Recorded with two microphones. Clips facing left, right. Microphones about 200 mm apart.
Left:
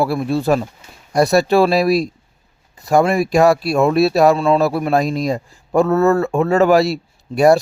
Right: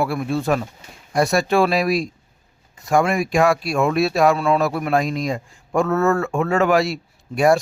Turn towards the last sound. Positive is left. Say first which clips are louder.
# left 4 dB
turn(degrees=35)  # may be behind; listen again after turning